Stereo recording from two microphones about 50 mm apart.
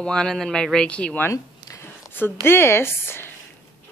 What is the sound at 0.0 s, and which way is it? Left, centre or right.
Speech, centre.